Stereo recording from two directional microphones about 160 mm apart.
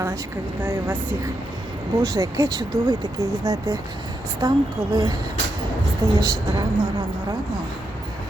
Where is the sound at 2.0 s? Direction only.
20° right (ahead or behind).